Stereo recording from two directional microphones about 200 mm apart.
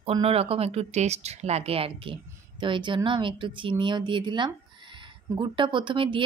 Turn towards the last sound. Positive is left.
turn(degrees=-25)  # may be behind; listen again after turning